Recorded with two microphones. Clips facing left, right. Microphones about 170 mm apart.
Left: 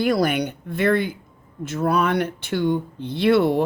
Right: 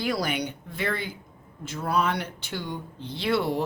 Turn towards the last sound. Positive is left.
turn(degrees=55)  # may be behind; listen again after turning